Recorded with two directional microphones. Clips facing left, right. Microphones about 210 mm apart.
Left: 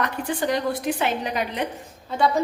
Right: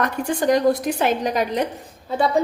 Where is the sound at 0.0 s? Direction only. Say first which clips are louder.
Right 4 dB; 45° right (ahead or behind).